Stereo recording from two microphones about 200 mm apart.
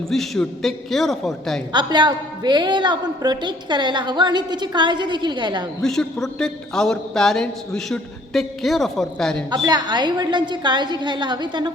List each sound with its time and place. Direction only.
0.1 s a man's voice: centre (ahead or behind)
1.7 s a woman's voice: 20° right (ahead or behind)
5.8 s a man's voice: centre (ahead or behind)
9.5 s a woman's voice: 20° right (ahead or behind)